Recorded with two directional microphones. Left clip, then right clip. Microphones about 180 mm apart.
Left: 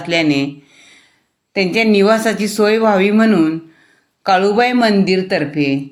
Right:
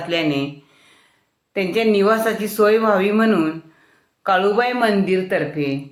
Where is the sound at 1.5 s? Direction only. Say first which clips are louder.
Left 4 dB; 40° left (ahead or behind).